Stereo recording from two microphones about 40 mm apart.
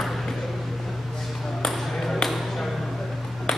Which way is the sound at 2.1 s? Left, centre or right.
Centre.